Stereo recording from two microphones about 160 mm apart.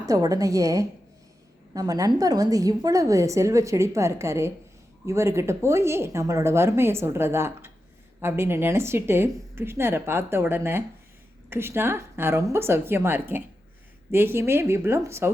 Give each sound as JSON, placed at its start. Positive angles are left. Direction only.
{"t": 0.0, "sound": "a woman's voice", "side_deg": -20}